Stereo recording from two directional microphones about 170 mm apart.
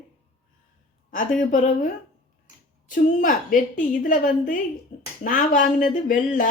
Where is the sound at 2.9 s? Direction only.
50° left (ahead or behind).